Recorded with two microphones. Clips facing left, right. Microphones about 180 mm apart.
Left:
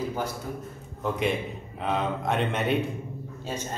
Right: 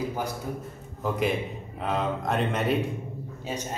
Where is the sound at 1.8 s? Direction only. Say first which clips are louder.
Even; centre (ahead or behind).